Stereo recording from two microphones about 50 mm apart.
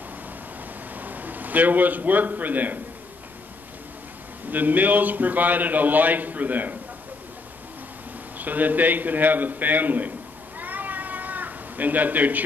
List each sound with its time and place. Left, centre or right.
0.9 s a man's voice: right
4.5 s a man's voice: right
8.4 s a man's voice: right
10.6 s cat: right